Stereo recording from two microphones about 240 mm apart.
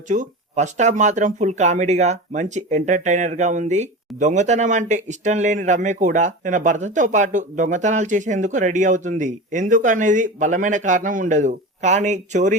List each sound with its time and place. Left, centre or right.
0.1 s speech: right